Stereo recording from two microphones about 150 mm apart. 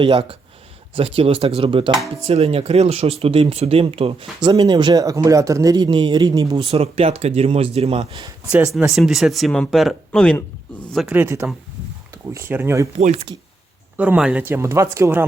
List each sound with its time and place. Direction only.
0.0 s speech: 40° right (ahead or behind)
1.9 s speech: centre (ahead or behind)
2.2 s speech: 40° right (ahead or behind)
4.4 s speech: 30° right (ahead or behind)
8.4 s speech: 5° right (ahead or behind)
10.9 s speech: 5° right (ahead or behind)
13.0 s speech: 45° right (ahead or behind)
13.9 s speech: 10° right (ahead or behind)